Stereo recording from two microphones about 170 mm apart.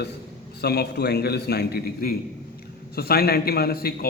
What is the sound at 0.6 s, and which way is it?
A man's voice, 70° left (ahead or behind).